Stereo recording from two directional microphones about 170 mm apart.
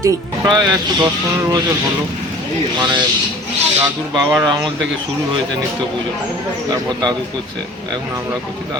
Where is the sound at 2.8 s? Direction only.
25° right (ahead or behind).